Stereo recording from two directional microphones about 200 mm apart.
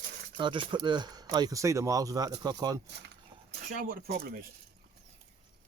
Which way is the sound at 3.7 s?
40° right (ahead or behind).